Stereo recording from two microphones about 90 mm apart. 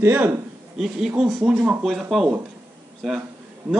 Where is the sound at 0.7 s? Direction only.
5° right (ahead or behind).